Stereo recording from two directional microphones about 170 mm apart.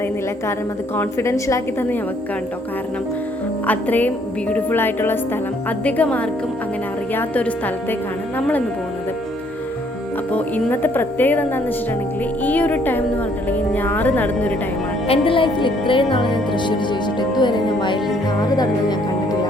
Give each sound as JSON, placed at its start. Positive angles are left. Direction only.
{"t": 0.9, "sound": "a woman's voice", "side_deg": 15}
{"t": 3.7, "sound": "a woman's voice", "side_deg": 10}
{"t": 10.3, "sound": "a woman's voice", "side_deg": 10}
{"t": 15.0, "sound": "speech", "side_deg": 35}